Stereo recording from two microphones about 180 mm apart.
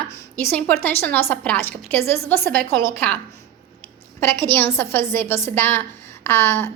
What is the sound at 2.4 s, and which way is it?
Speech, 60° right (ahead or behind).